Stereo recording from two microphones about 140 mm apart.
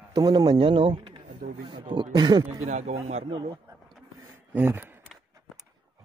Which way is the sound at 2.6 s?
55° right (ahead or behind).